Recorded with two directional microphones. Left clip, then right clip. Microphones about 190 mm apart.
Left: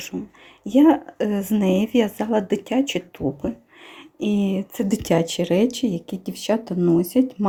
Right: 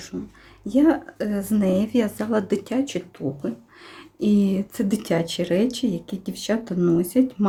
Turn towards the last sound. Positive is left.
turn(degrees=20)  # may be behind; listen again after turning